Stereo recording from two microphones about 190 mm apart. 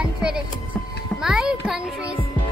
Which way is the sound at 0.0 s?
5° right (ahead or behind).